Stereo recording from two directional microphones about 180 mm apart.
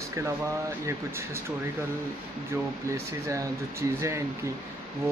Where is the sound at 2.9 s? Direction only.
15° right (ahead or behind).